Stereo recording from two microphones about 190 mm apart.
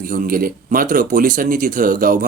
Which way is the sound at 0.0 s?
50° right (ahead or behind).